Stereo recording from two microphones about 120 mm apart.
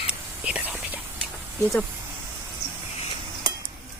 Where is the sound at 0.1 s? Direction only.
10° right (ahead or behind).